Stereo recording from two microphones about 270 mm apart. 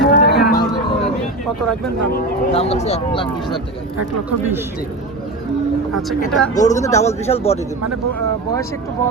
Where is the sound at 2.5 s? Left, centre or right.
Left.